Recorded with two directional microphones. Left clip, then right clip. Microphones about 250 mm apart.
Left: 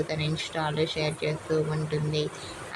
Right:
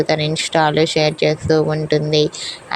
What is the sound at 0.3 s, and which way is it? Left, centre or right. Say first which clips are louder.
A woman's voice: right 14 dB; right.